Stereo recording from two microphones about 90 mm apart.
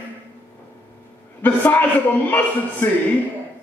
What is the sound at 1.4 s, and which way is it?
Speech, 20° left (ahead or behind).